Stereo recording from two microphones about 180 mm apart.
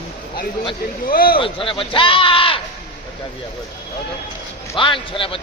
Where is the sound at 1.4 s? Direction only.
30° left (ahead or behind).